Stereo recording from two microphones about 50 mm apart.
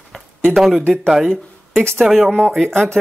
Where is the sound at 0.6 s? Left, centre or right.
Centre.